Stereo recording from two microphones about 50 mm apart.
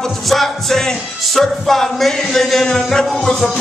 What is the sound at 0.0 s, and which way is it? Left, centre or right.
Music, centre.